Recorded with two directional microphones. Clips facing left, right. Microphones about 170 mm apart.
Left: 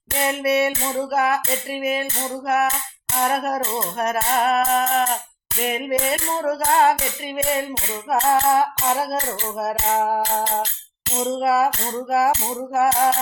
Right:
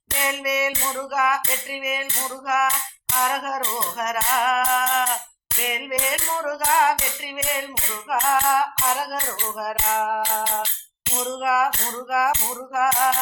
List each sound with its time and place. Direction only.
0.2 s music: 30° left (ahead or behind)
8.1 s tambourine: 30° left (ahead or behind)
10.4 s music: 40° left (ahead or behind)
11.2 s tambourine: 30° left (ahead or behind)